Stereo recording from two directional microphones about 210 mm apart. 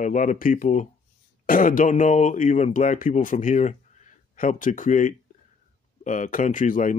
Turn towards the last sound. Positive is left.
turn(degrees=40)  # may be behind; listen again after turning